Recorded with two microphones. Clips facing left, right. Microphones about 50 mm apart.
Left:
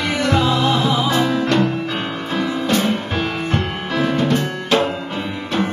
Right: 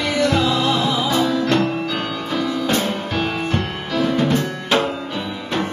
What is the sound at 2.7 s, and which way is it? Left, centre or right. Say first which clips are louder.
Music: left 2 dB; left.